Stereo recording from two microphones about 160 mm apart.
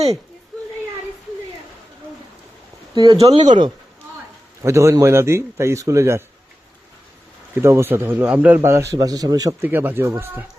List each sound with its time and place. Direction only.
2.9 s speech: 25° right (ahead or behind)
4.6 s a man's voice: 15° right (ahead or behind)
7.6 s a man's voice: 15° right (ahead or behind)